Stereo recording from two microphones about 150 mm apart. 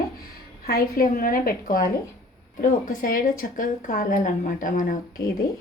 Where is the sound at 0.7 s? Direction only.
80° left; by 5.2 s 60° left (ahead or behind).